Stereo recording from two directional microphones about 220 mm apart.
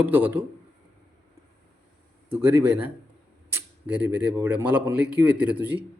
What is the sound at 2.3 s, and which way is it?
Speech, 10° right (ahead or behind).